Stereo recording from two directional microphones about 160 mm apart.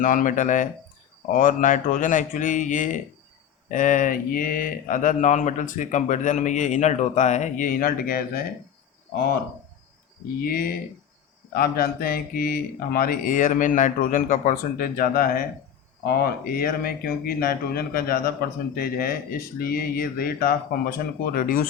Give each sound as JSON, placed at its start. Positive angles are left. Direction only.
{"t": 0.0, "sound": "speech", "side_deg": 55}
{"t": 10.4, "sound": "speech", "side_deg": 65}